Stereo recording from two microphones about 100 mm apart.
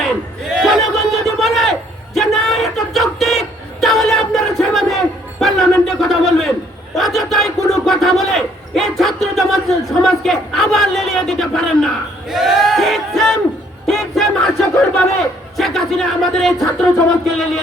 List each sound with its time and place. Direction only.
0.0 s crowd: centre (ahead or behind)
2.1 s music: centre (ahead or behind)
6.9 s battle cry: centre (ahead or behind)
13.8 s a sound: centre (ahead or behind)